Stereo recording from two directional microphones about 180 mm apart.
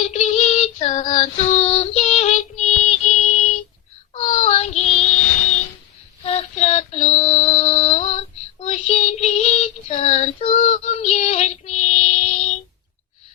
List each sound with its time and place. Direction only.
0.0 s female singing: 40° left (ahead or behind)
4.1 s child singing: 40° left (ahead or behind)
6.2 s female singing: 35° left (ahead or behind)
8.6 s child singing: 40° left (ahead or behind)